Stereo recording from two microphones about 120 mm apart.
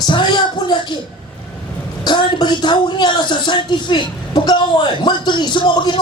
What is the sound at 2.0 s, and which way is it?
Speech, 40° left (ahead or behind).